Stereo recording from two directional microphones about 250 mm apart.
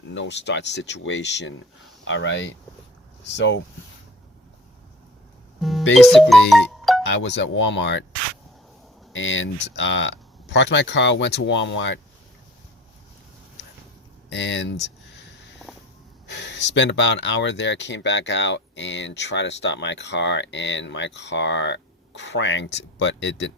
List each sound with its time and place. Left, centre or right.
0.1 s speech: left
5.5 s music: centre
5.9 s speech: centre
7.0 s speech: left
9.1 s speech: left
14.3 s speech: left
15.6 s a sound: centre
16.2 s speech: left